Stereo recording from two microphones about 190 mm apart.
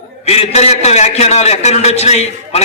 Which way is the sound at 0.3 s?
35° left (ahead or behind).